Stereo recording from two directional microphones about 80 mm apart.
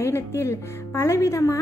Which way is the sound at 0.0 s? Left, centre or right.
Left.